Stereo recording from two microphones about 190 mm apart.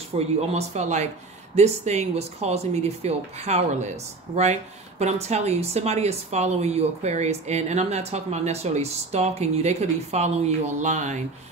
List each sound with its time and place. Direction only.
0.1 s speech: 35° right (ahead or behind)